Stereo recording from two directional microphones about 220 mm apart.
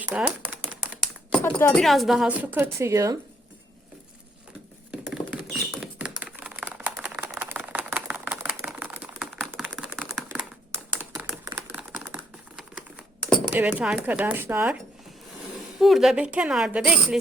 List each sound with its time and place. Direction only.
0.1 s speech: 5° right (ahead or behind)
1.5 s speech: 5° left (ahead or behind); by 3.2 s 15° right (ahead or behind)
5.1 s typing: 5° right (ahead or behind)
10.9 s computer keyboard: 10° right (ahead or behind)
15.8 s speech: centre (ahead or behind)